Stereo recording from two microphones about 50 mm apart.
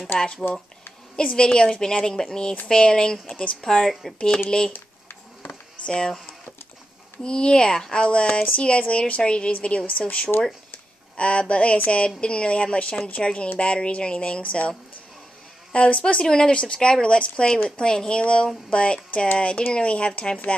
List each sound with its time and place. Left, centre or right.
0.2 s a woman's voice: centre
3.7 s speech: centre
4.5 s a woman's voice: centre
5.4 s a sound: left
7.2 s speech: centre
15.7 s speech: left